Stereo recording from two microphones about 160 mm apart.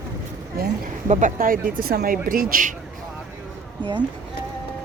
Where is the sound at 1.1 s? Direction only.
50° right (ahead or behind).